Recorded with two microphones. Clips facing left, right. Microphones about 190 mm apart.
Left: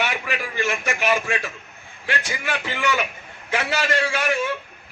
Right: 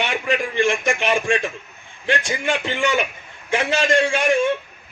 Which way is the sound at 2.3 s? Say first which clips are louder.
Right 5 dB; 25° right (ahead or behind).